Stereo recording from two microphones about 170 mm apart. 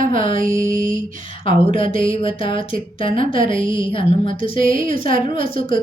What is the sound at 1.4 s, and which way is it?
A woman's voice, 30° left (ahead or behind).